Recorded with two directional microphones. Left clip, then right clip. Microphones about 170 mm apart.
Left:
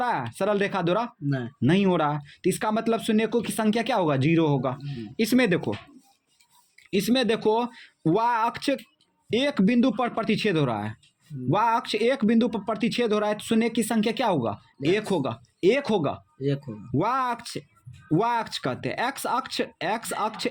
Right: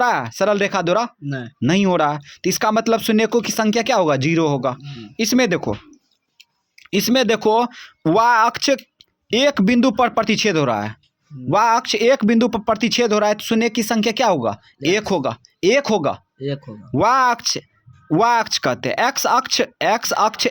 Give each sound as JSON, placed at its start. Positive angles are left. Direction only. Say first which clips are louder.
{"t": 0.0, "sound": "speech", "louder": "right 8 dB", "side_deg": -30}
{"t": 6.8, "sound": "speech", "louder": "right 7 dB", "side_deg": -35}